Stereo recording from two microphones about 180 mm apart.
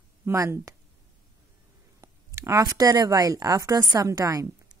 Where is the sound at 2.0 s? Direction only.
15° right (ahead or behind).